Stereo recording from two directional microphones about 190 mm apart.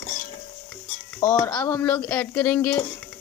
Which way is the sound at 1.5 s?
10° left (ahead or behind).